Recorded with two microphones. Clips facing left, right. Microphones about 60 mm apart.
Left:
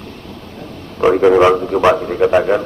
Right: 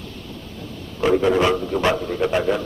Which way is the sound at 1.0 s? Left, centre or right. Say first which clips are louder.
Left 7 dB; left.